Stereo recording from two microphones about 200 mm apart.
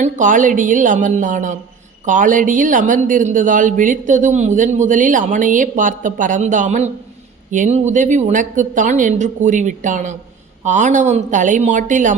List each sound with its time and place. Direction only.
0.0 s speech: 40° right (ahead or behind)